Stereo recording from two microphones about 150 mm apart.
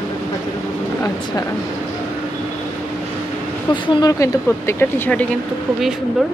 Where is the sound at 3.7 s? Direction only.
30° left (ahead or behind); by 5.2 s 10° left (ahead or behind).